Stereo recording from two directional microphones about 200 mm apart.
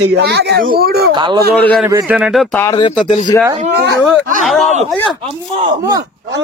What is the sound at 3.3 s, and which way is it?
Speech, 15° left (ahead or behind).